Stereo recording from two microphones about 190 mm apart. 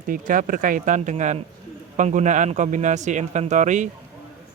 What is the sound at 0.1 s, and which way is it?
Speech, 45° right (ahead or behind).